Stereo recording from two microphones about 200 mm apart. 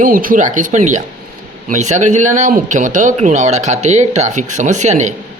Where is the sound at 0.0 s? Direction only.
45° right (ahead or behind).